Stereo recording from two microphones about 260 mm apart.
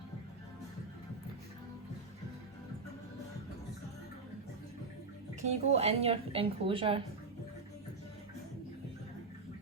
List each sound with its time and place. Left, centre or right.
5.4 s a woman's voice: right